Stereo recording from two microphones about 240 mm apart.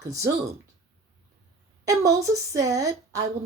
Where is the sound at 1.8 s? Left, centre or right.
Centre.